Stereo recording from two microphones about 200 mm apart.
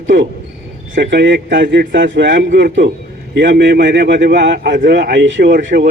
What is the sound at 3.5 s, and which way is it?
Speech, 60° right (ahead or behind).